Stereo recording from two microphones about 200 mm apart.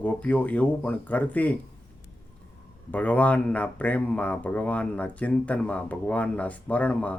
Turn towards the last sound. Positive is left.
turn(degrees=5)  # may be behind; listen again after turning